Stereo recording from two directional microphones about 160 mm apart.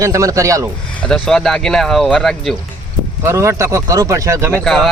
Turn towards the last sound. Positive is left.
turn(degrees=0)  # may be behind; listen again after turning